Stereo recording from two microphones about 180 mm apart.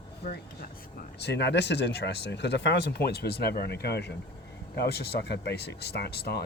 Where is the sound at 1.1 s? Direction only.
70° left (ahead or behind).